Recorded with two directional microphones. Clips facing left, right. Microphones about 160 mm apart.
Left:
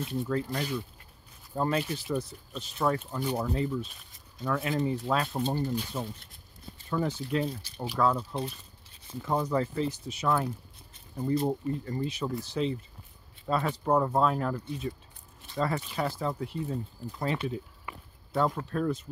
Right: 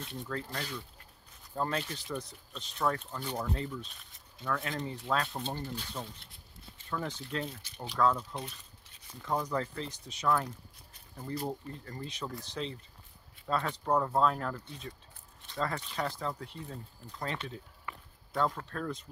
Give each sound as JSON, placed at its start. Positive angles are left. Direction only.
{"t": 0.2, "sound": "speech", "side_deg": 10}
{"t": 6.1, "sound": "a sound", "side_deg": 45}
{"t": 6.9, "sound": "speech", "side_deg": 10}
{"t": 7.4, "sound": "speech", "side_deg": 35}
{"t": 7.8, "sound": "speech", "side_deg": 10}
{"t": 8.2, "sound": "speech", "side_deg": 30}
{"t": 8.9, "sound": "zipper", "side_deg": 25}
{"t": 9.5, "sound": "speech", "side_deg": 5}
{"t": 10.9, "sound": "a sound", "side_deg": 20}
{"t": 11.6, "sound": "speech", "side_deg": 10}